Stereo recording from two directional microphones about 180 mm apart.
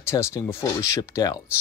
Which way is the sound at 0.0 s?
15° left (ahead or behind).